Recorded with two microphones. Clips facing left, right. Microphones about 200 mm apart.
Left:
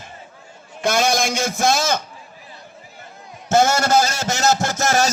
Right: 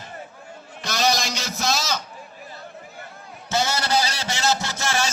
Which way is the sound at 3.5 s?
50° left (ahead or behind).